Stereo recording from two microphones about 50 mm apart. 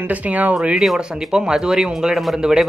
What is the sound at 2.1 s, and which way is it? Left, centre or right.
Speech, centre.